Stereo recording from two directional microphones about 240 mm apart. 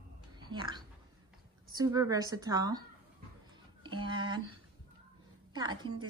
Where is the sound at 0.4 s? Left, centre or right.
Centre.